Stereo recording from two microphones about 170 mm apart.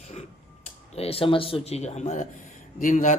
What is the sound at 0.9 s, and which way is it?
A man's voice, 35° left (ahead or behind).